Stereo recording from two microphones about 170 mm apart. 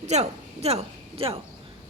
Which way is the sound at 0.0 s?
40° right (ahead or behind).